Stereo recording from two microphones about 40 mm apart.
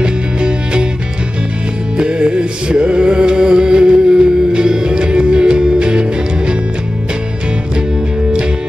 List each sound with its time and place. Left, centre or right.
0.0 s music: right
2.0 s music: right